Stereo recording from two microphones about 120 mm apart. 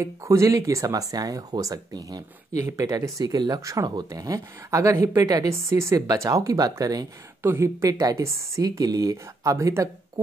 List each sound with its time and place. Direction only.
0.0 s speech: 25° right (ahead or behind)